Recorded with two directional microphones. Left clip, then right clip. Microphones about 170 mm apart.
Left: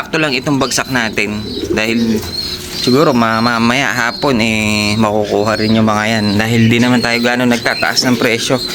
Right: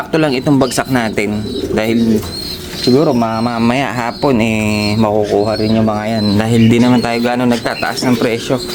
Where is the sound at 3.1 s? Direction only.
15° left (ahead or behind).